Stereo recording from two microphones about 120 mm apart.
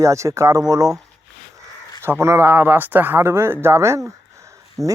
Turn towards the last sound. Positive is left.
turn(degrees=0)  # may be behind; listen again after turning